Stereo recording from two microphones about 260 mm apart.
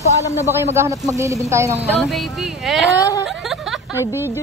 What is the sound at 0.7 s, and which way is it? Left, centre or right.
Speech, centre.